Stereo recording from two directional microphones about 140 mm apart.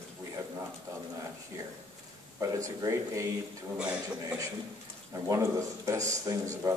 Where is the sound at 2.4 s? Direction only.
20° right (ahead or behind).